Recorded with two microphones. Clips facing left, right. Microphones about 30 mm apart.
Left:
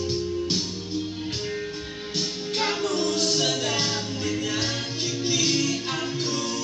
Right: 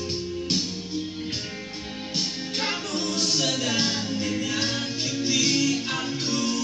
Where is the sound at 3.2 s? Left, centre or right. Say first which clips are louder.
Left 1 dB; left.